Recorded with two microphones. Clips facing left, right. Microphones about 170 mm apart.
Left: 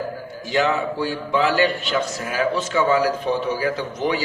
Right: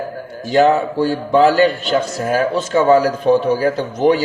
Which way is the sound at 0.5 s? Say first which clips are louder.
Right 8 dB; 45° right (ahead or behind).